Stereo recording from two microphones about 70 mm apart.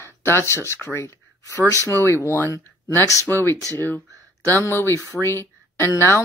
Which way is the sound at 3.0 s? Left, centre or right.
Left.